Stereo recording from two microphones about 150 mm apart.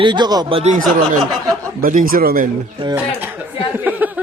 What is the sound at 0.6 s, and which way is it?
Speech, 55° right (ahead or behind).